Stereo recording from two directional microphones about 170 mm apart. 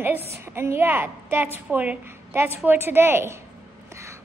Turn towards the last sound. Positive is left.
turn(degrees=-15)  # may be behind; listen again after turning